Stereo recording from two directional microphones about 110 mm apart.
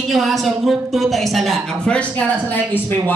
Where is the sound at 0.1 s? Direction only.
Centre (ahead or behind).